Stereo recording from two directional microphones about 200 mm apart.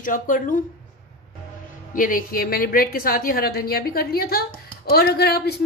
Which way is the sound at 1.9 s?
45° left (ahead or behind).